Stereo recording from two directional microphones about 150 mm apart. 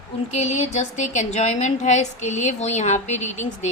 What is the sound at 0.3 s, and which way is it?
A woman's voice, 45° left (ahead or behind).